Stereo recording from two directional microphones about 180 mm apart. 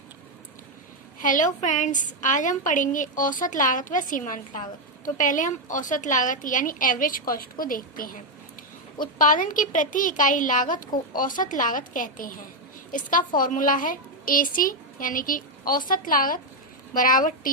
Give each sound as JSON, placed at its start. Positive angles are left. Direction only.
{"t": 1.2, "sound": "a woman's voice", "side_deg": 45}